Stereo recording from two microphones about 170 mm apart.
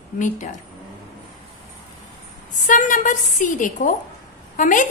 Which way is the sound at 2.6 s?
50° left (ahead or behind).